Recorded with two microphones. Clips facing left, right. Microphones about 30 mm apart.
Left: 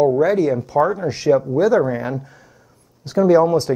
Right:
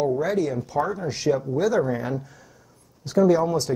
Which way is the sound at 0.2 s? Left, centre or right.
Left.